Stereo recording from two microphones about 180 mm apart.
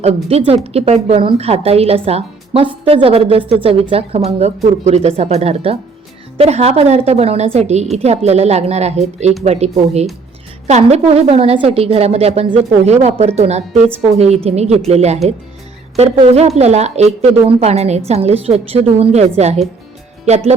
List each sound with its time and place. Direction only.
0.0 s a woman's voice: 35° right (ahead or behind)